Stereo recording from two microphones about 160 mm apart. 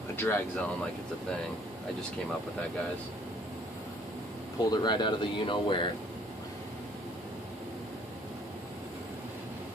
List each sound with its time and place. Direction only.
0.1 s speech: 15° left (ahead or behind)
4.6 s speech: 30° left (ahead or behind)